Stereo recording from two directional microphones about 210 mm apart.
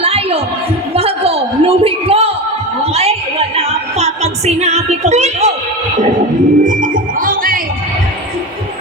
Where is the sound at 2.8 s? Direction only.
30° right (ahead or behind).